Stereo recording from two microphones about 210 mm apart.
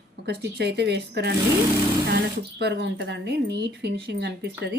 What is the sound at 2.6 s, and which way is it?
A woman's voice, 50° right (ahead or behind).